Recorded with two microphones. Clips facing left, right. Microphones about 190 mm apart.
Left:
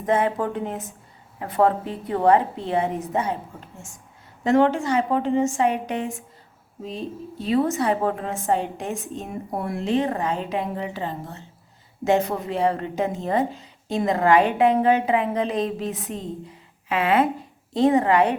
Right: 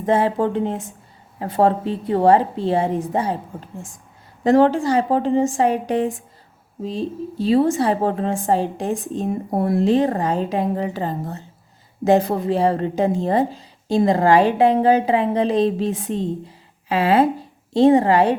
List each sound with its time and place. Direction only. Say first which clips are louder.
0.0 s a woman's voice: right 4 dB; 30° right (ahead or behind)